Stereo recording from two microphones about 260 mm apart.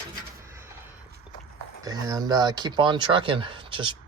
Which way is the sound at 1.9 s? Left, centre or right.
Centre.